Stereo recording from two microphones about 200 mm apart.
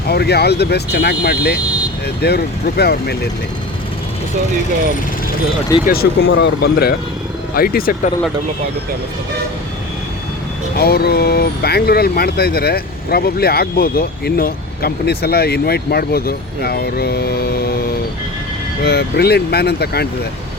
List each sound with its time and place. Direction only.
0.1 s speech: 55° left (ahead or behind)
5.8 s speech: 50° left (ahead or behind)
10.8 s speech: 50° left (ahead or behind)
18.8 s speech: 55° left (ahead or behind)